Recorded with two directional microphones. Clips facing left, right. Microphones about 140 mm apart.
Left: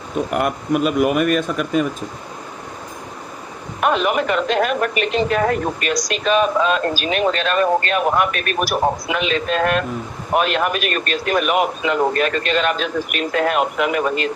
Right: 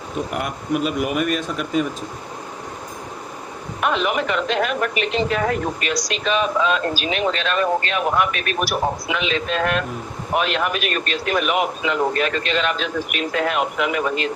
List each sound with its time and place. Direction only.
0.3 s speech: 50° left (ahead or behind)
3.8 s speech: 45° left (ahead or behind)